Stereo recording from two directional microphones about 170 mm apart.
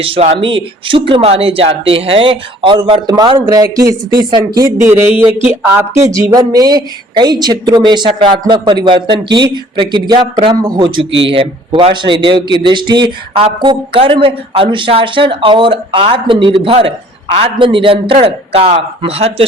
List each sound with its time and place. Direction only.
0.0 s speech: 35° right (ahead or behind); by 5.8 s 10° right (ahead or behind)
6.3 s a man's voice: 20° right (ahead or behind)